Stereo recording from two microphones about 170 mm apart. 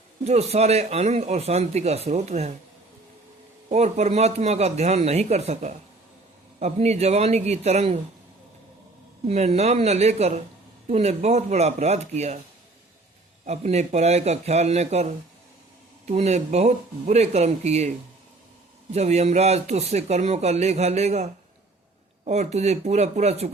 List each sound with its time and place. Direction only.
0.3 s a man's voice: 40° right (ahead or behind)
3.7 s a man's voice: 40° right (ahead or behind)
9.2 s a man's voice: 40° right (ahead or behind)
13.4 s a man's voice: 40° right (ahead or behind)
16.0 s a man's voice: 40° right (ahead or behind)
18.9 s a man's voice: 40° right (ahead or behind)